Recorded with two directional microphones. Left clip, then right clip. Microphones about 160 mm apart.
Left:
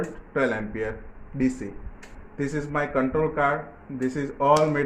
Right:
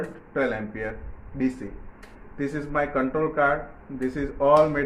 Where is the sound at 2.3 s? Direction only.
40° left (ahead or behind).